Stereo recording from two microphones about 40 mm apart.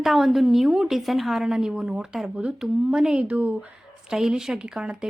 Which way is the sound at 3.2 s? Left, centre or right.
Right.